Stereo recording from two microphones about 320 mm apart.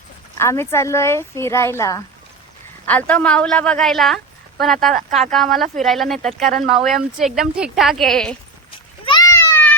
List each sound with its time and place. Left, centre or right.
0.3 s a woman's voice: centre
4.9 s speech: right
5.3 s a woman's voice: centre
9.0 s a sound: centre